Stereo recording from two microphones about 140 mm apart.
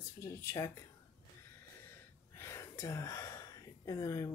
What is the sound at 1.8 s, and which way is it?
Gasp, 20° left (ahead or behind).